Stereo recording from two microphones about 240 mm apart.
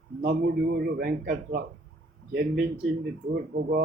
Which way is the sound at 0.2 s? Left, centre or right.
Right.